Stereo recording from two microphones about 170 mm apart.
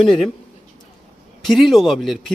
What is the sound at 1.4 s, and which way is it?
Speech, centre (ahead or behind).